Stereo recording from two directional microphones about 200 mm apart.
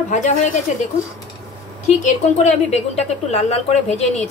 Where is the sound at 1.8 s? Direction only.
35° left (ahead or behind).